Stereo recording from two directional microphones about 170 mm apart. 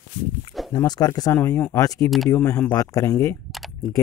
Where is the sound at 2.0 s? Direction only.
Centre (ahead or behind).